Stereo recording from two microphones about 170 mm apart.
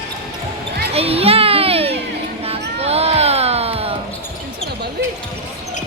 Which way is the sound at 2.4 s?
35° right (ahead or behind).